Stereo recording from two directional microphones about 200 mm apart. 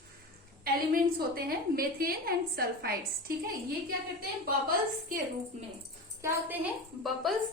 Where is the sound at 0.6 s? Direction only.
50° right (ahead or behind).